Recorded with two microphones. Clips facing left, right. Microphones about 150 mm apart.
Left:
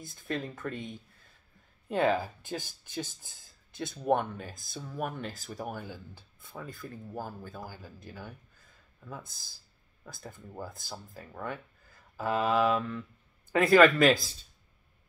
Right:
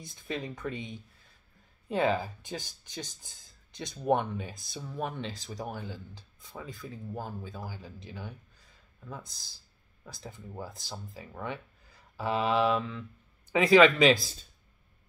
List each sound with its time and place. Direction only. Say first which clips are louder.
0.0 s speech: left 1 dB; centre (ahead or behind)
1.9 s speech: left 1 dB; centre (ahead or behind)
5.4 s speech: even; 20° right (ahead or behind)
5.7 s speech: even; 5° left (ahead or behind)
10.0 s speech: right 1 dB; 5° left (ahead or behind)